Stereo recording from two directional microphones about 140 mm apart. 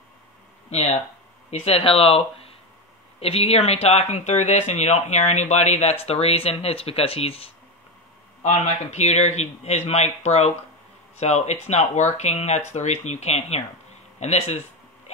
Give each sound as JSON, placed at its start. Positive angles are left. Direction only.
{"t": 0.7, "sound": "speech", "side_deg": 50}
{"t": 8.4, "sound": "speech", "side_deg": 55}